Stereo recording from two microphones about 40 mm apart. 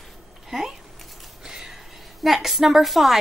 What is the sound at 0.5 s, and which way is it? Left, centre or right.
Speech, centre.